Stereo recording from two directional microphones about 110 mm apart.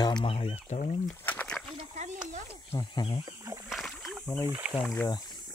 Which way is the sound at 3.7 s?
Centre (ahead or behind).